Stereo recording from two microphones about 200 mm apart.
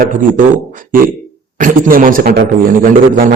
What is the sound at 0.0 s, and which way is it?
A man's voice, 40° right (ahead or behind).